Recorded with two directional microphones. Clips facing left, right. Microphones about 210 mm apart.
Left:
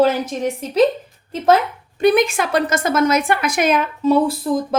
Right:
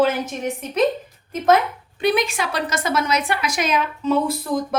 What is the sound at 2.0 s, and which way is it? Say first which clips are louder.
Speech: left 5 dB; 45° left (ahead or behind).